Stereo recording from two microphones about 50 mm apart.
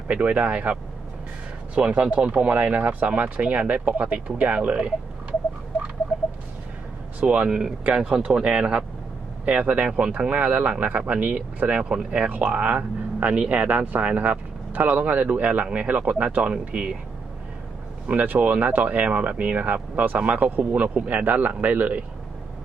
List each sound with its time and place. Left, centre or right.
0.1 s speech: right
1.7 s speech: right
7.2 s speech: right
10.2 s speech: right
15.9 s speech: right
18.2 s speech: right